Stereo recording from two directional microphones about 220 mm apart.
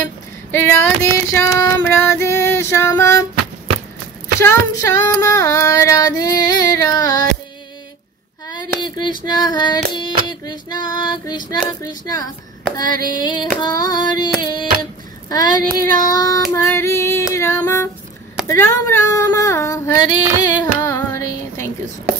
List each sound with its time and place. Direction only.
0.0 s child singing: 10° left (ahead or behind)
4.4 s child singing: 15° left (ahead or behind)
8.5 s female singing: 20° left (ahead or behind)
17.3 s music: 15° left (ahead or behind)
18.5 s female singing: 15° left (ahead or behind)